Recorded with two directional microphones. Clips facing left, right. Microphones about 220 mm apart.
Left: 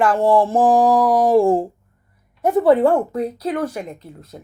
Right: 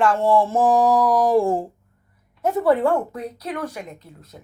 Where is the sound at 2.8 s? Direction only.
35° left (ahead or behind).